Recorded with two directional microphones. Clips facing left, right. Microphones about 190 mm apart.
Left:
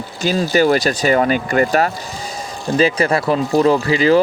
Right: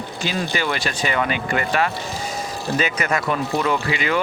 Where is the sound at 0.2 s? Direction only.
40° left (ahead or behind).